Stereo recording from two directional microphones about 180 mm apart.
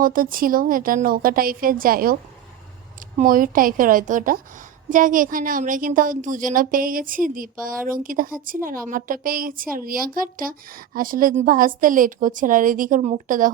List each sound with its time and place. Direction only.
0.0 s a woman's voice: 50° right (ahead or behind)
3.2 s a woman's voice: 50° right (ahead or behind)